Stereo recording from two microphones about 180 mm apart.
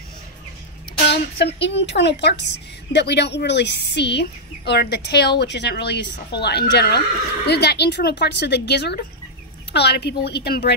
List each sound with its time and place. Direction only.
1.0 s a woman's voice: 70° left (ahead or behind)